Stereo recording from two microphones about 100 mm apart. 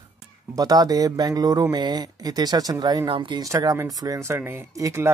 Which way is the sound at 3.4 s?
35° right (ahead or behind).